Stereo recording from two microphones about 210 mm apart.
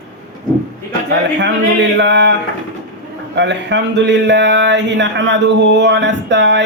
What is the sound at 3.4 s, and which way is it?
Speech, 55° right (ahead or behind).